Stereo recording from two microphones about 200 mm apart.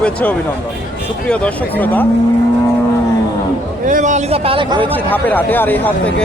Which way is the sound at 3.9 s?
40° right (ahead or behind).